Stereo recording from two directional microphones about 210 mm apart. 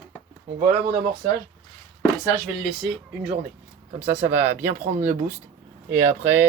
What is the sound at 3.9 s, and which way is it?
Speech, 30° right (ahead or behind).